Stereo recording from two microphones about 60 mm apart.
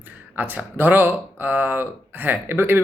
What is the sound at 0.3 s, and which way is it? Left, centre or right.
Speech, right.